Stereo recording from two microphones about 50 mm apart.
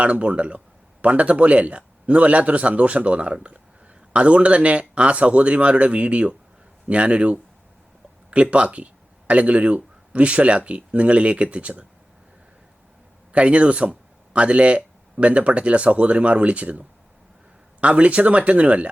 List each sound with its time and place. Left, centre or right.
0.0 s speech: right
13.3 s speech: right